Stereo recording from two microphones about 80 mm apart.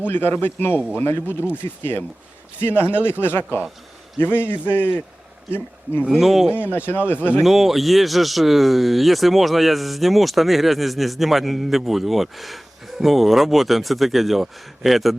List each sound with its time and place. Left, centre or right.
0.0 s speech: left
6.0 s speech: centre
6.7 s speech: left
7.4 s speech: centre